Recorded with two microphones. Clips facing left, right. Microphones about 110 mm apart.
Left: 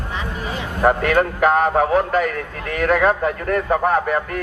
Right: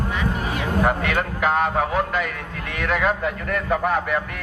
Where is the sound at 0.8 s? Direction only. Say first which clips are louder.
Left 10 dB; 45° left (ahead or behind).